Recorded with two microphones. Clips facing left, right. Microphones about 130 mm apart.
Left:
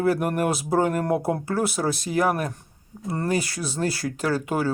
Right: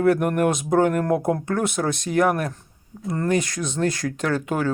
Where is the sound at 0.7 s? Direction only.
35° left (ahead or behind).